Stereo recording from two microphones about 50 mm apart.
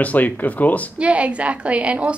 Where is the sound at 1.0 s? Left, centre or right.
Right.